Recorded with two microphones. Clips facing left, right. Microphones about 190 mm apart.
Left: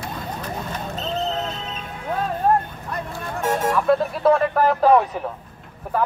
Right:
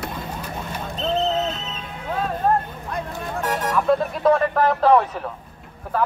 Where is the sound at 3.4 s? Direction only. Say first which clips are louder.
Left 3 dB; 25° left (ahead or behind).